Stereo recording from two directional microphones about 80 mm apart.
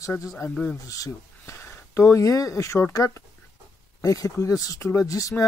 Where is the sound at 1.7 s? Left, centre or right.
Left.